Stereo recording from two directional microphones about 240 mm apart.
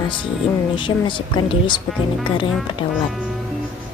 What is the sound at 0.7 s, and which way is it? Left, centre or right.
A woman's voice, centre.